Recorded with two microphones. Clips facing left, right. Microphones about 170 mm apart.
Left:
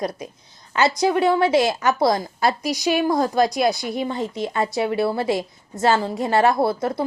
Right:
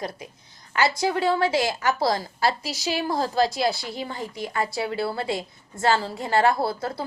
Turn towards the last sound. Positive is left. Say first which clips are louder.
# left 6 dB
turn(degrees=20)  # may be behind; listen again after turning